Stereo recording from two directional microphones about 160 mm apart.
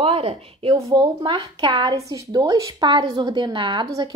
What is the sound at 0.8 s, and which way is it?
Speech, 25° right (ahead or behind).